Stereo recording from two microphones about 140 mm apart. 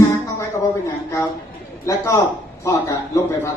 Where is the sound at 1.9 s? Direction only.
25° left (ahead or behind).